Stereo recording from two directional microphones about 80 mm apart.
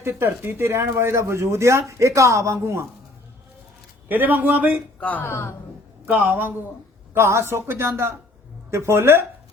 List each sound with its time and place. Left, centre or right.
0.0 s speech: right
4.1 s a man's voice: right
4.9 s speech: left
5.2 s a woman's voice: left
6.1 s a man's voice: right